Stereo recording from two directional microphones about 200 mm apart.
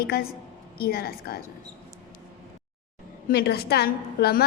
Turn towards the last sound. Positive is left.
turn(degrees=50)  # may be behind; listen again after turning